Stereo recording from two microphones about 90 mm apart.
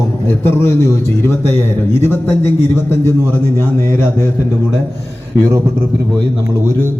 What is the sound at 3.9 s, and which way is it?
Speech, 30° left (ahead or behind).